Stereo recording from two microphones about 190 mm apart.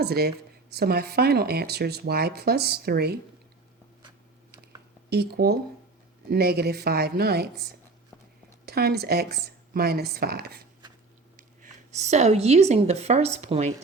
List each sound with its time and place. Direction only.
0.0 s speech: 55° right (ahead or behind)
5.0 s speech: 55° right (ahead or behind)
11.3 s speech: 40° right (ahead or behind)